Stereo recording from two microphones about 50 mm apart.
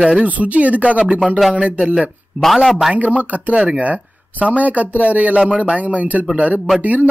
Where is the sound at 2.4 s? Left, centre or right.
Centre.